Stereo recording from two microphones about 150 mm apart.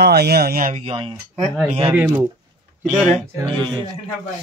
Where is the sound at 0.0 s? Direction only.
90° right; by 0.8 s 65° right (ahead or behind).